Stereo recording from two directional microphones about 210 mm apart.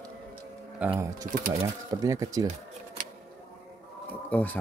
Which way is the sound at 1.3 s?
40° right (ahead or behind).